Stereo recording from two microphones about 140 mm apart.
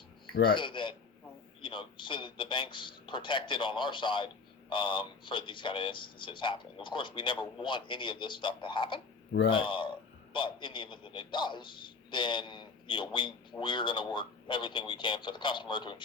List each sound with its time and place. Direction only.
0.5 s speech: 35° left (ahead or behind)